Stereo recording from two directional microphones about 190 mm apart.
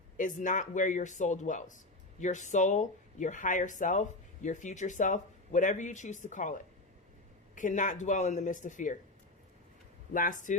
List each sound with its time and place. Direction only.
0.2 s speech: 40° left (ahead or behind)
10.1 s speech: 45° left (ahead or behind)